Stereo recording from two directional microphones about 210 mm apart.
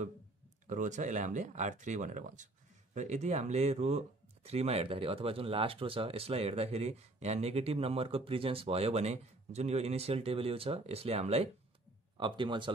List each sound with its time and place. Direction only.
0.7 s speech: 35° right (ahead or behind)